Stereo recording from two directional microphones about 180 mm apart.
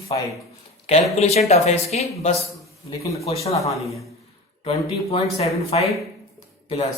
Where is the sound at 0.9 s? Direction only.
35° left (ahead or behind).